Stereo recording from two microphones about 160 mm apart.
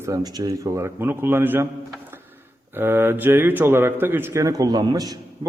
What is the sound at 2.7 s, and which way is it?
A man's voice, 15° right (ahead or behind).